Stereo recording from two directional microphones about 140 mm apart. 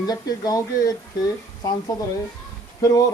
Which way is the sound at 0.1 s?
25° left (ahead or behind).